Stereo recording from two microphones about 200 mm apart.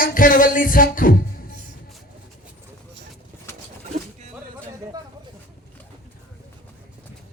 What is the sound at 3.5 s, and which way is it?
Bird, 15° left (ahead or behind).